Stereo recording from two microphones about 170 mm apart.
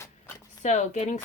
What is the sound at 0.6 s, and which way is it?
Speech, 45° left (ahead or behind).